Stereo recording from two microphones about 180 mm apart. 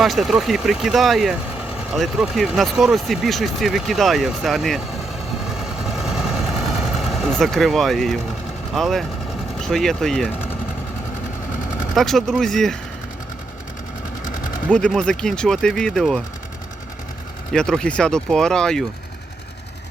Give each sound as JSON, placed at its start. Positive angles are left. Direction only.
{"t": 0.0, "sound": "speech", "side_deg": 0}
{"t": 5.5, "sound": "vehicle", "side_deg": 0}
{"t": 8.7, "sound": "speech", "side_deg": 0}
{"t": 11.9, "sound": "speech", "side_deg": 0}
{"t": 14.7, "sound": "speech", "side_deg": 5}
{"t": 17.5, "sound": "speech", "side_deg": 5}